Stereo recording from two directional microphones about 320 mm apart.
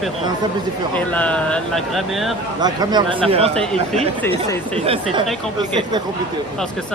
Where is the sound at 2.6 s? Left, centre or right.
Centre.